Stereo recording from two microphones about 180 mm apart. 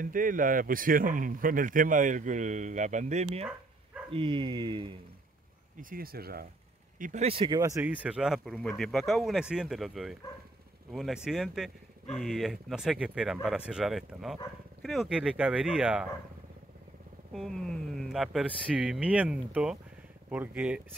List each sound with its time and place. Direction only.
0.0 s speech: 50° right (ahead or behind)
4.1 s speech: 30° right (ahead or behind)
5.8 s speech: 50° right (ahead or behind)
7.0 s speech: 45° right (ahead or behind)
7.2 s speech: 30° right (ahead or behind); by 16.1 s 5° right (ahead or behind)
17.3 s speech: centre (ahead or behind)